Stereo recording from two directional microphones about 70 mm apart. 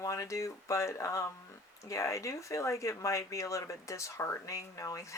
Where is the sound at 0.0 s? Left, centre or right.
Left.